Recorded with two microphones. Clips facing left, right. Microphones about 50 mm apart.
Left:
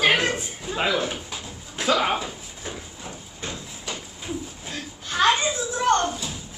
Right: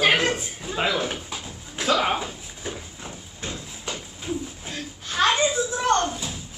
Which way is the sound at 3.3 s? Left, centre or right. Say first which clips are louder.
Even; left.